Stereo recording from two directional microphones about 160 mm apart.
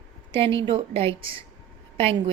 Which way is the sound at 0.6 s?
35° right (ahead or behind).